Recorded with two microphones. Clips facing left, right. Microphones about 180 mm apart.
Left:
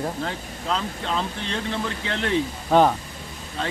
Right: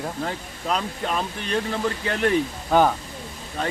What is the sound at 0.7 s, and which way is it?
Speech, 10° right (ahead or behind).